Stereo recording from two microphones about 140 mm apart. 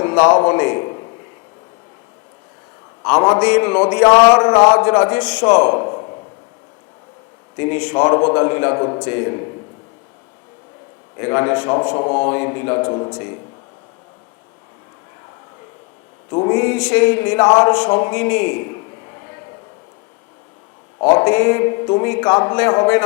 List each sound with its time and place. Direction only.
0.0 s a man's voice: 15° left (ahead or behind)
3.0 s a man's voice: 20° left (ahead or behind)
4.0 s speech: 30° left (ahead or behind)
4.8 s a man's voice: 15° left (ahead or behind)
7.5 s a man's voice: 10° left (ahead or behind)
11.2 s a man's voice: 15° left (ahead or behind)
16.3 s a man's voice: 20° left (ahead or behind)
17.7 s a sound: 10° left (ahead or behind)
21.2 s speech: 20° left (ahead or behind)